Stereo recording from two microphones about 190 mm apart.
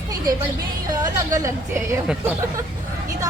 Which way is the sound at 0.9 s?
15° right (ahead or behind).